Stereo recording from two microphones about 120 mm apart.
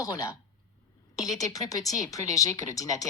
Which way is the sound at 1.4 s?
30° left (ahead or behind).